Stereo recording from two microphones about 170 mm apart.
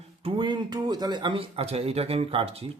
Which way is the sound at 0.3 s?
30° right (ahead or behind).